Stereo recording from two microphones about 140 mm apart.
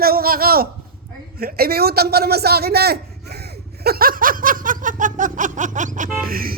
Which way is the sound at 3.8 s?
90° right.